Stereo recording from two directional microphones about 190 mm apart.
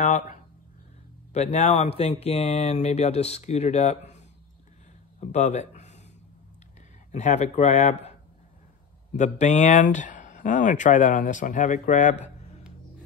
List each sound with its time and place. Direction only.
0.0 s speech: 40° left (ahead or behind)
5.2 s speech: 35° left (ahead or behind)
7.1 s speech: 40° left (ahead or behind)